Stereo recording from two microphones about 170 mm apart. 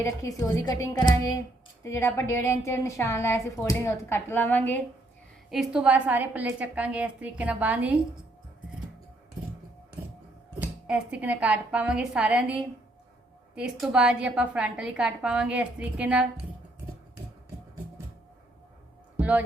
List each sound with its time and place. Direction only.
0.0 s a woman's voice: 20° left (ahead or behind)
5.5 s a woman's voice: 5° right (ahead or behind)
10.6 s a woman's voice: 5° right (ahead or behind)
19.1 s music: 10° right (ahead or behind)